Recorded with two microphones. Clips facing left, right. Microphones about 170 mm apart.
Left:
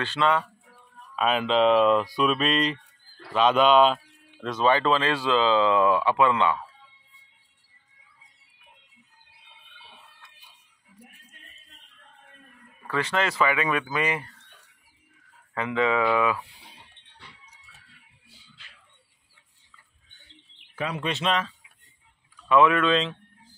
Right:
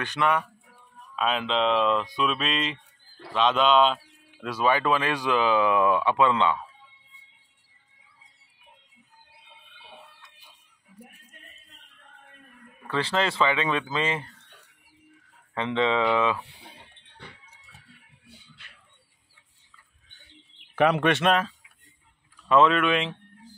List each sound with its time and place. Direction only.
0.0 s speech: 15° right (ahead or behind)
1.1 s speech: centre (ahead or behind)
4.4 s speech: 10° right (ahead or behind)
13.0 s speech: 30° right (ahead or behind)
13.4 s speech: 10° left (ahead or behind)
15.5 s speech: 25° right (ahead or behind)
16.6 s music: 55° right (ahead or behind)
20.7 s speech: 70° right (ahead or behind); by 21.5 s 55° right (ahead or behind)
22.8 s speech: 15° right (ahead or behind)